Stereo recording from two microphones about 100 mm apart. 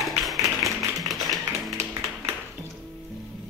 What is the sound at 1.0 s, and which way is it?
Music, centre (ahead or behind).